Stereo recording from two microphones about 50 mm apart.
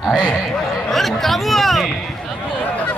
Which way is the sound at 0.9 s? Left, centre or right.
Centre.